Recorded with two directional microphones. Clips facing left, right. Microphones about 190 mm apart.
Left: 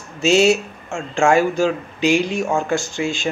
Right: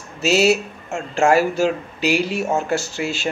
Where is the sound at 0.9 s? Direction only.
40° right (ahead or behind).